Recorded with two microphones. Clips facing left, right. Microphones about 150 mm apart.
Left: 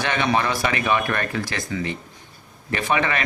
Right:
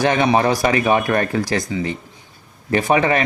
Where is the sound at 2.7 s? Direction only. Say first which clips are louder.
Right 6 dB; 35° right (ahead or behind).